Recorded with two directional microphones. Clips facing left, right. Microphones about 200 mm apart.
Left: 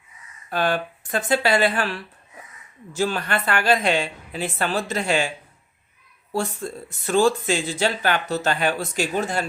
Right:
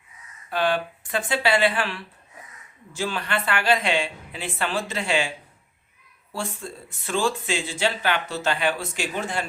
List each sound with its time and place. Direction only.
0.5 s a woman's voice: 45° left (ahead or behind)
6.3 s speech: 40° left (ahead or behind)